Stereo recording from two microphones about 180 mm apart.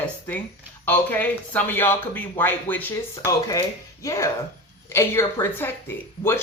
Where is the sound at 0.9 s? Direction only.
10° left (ahead or behind).